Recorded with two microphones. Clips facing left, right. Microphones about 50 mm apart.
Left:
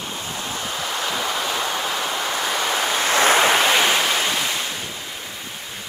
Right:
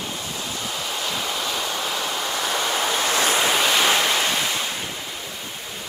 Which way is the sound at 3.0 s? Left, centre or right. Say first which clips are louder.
Left 7 dB; left.